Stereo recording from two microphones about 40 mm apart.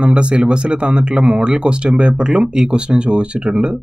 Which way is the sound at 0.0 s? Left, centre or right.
Right.